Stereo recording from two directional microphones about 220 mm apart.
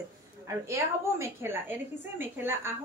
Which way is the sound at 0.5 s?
10° right (ahead or behind).